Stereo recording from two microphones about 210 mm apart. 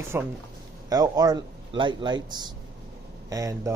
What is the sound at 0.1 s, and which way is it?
A man's voice, 10° right (ahead or behind).